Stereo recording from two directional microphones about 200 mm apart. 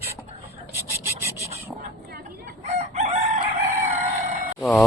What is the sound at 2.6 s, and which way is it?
Chicken, 35° right (ahead or behind).